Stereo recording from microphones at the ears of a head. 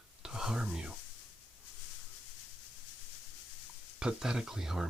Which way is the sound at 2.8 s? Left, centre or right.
Left.